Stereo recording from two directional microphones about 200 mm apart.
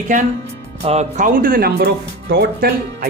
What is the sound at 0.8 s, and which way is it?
Speech, 35° right (ahead or behind).